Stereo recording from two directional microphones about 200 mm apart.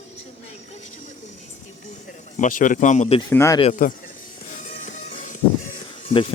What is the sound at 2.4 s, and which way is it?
Speech, 40° left (ahead or behind).